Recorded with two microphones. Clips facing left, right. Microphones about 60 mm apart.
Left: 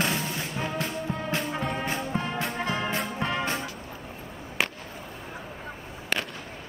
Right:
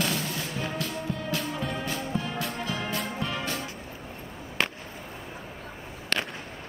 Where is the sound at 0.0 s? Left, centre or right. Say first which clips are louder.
Left 1 dB; left.